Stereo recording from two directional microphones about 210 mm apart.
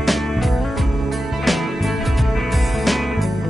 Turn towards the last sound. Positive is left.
turn(degrees=0)  # may be behind; listen again after turning